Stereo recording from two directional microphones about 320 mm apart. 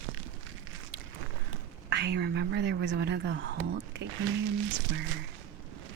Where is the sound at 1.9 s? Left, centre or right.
Right.